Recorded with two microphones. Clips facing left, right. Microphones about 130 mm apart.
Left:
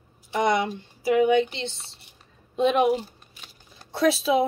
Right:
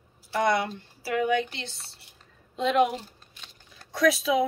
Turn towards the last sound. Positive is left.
turn(degrees=30)  # may be behind; listen again after turning